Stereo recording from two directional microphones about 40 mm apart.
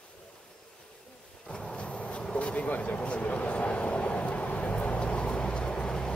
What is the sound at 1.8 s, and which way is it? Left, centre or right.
Bee, left.